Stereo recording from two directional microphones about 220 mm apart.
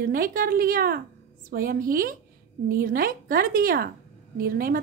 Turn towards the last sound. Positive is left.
turn(degrees=-40)  # may be behind; listen again after turning